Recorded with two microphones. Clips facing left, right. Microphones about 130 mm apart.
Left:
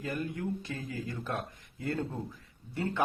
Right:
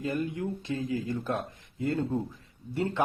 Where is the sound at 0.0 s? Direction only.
20° right (ahead or behind).